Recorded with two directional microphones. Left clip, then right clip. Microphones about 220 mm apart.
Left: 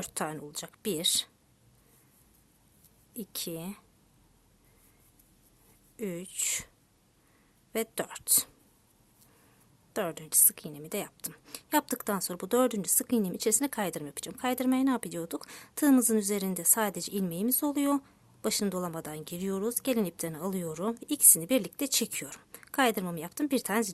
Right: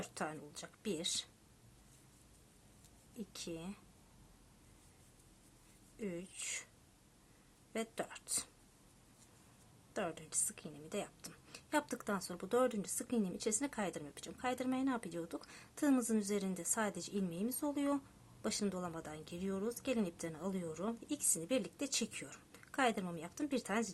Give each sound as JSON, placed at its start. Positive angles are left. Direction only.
{"t": 0.0, "sound": "a woman's voice", "side_deg": 45}
{"t": 3.2, "sound": "a woman's voice", "side_deg": 45}
{"t": 6.0, "sound": "a woman's voice", "side_deg": 50}
{"t": 7.7, "sound": "a woman's voice", "side_deg": 45}
{"t": 9.9, "sound": "a woman's voice", "side_deg": 45}